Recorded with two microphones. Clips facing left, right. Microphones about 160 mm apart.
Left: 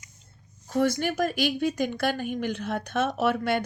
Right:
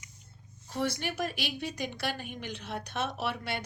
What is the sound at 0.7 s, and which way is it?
A woman's voice, 45° left (ahead or behind).